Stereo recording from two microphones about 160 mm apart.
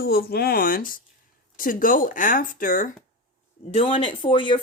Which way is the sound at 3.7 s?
35° left (ahead or behind).